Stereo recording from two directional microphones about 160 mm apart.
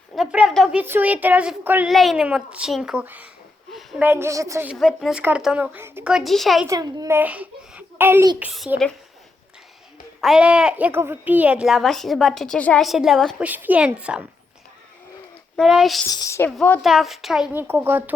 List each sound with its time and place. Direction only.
0.2 s a child's voice: 5° right (ahead or behind)
3.7 s a sound: centre (ahead or behind)
4.0 s a child's voice: 15° right (ahead or behind)
4.7 s a woman's voice: centre (ahead or behind)
6.7 s a child's voice: 25° right (ahead or behind)
7.2 s a child's voice: 10° right (ahead or behind)
10.2 s a woman's voice: centre (ahead or behind)
15.5 s a woman's voice: centre (ahead or behind)
16.1 s a woman's voice: 20° left (ahead or behind)
16.8 s a woman's voice: centre (ahead or behind)
17.5 s a child's voice: 15° right (ahead or behind)